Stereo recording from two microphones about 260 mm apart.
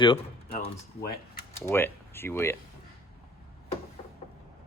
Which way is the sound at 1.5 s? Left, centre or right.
Centre.